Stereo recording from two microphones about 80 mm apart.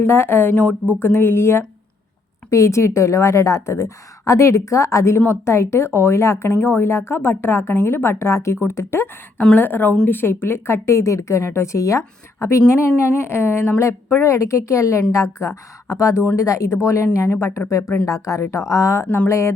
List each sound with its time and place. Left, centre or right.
0.0 s speech: left
0.5 s speech: centre; by 19.5 s left